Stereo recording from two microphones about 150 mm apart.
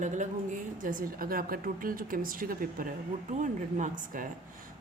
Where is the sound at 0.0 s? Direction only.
55° right (ahead or behind).